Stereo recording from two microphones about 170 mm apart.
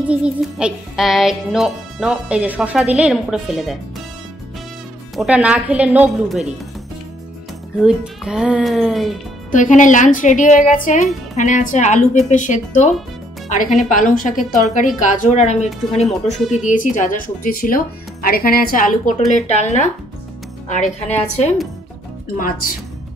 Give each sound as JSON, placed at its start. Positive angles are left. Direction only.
{"t": 0.1, "sound": "speech", "side_deg": -5}
{"t": 5.1, "sound": "speech", "side_deg": -5}
{"t": 7.8, "sound": "speech", "side_deg": -5}
{"t": 9.5, "sound": "speech", "side_deg": 50}
{"t": 16.3, "sound": "speech", "side_deg": 0}
{"t": 16.6, "sound": "speech", "side_deg": 50}
{"t": 21.1, "sound": "a woman's voice", "side_deg": 40}